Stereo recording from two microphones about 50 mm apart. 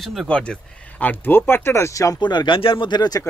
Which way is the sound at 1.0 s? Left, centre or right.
Left.